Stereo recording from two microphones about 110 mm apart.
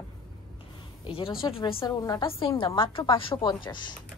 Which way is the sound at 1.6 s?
35° left (ahead or behind).